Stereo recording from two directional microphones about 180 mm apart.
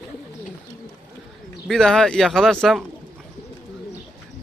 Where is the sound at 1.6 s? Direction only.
5° left (ahead or behind).